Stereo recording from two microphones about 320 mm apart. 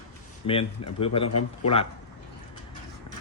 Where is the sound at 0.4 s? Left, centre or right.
Centre.